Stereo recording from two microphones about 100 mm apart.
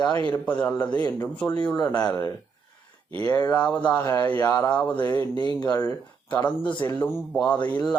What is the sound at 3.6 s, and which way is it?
Speech, 15° left (ahead or behind).